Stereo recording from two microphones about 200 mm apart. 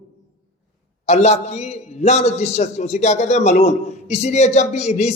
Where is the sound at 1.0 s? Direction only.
35° left (ahead or behind).